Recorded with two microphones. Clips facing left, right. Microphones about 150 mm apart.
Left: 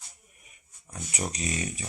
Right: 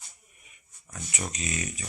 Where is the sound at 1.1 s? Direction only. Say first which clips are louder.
Left 2 dB; 35° left (ahead or behind).